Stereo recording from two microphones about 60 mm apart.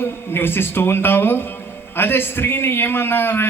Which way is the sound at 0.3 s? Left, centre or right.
Left.